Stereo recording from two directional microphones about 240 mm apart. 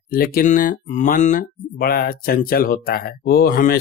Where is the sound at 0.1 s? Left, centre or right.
Left.